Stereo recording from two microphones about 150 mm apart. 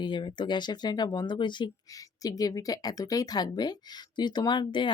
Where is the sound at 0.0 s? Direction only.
30° left (ahead or behind).